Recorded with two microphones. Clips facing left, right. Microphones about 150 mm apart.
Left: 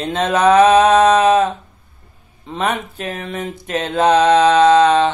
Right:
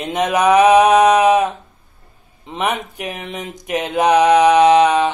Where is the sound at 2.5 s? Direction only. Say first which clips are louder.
Left 1 dB; 15° right (ahead or behind).